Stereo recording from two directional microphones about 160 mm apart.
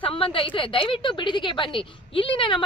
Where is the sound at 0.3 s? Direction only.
30° left (ahead or behind).